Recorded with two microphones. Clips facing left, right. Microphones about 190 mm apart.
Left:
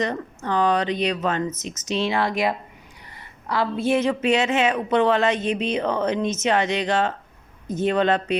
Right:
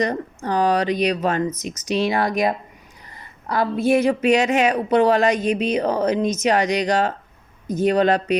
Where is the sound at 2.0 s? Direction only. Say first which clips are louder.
Right 1 dB; 40° right (ahead or behind).